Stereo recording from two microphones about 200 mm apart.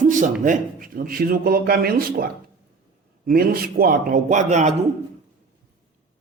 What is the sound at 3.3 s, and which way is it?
A man's voice, 50° right (ahead or behind).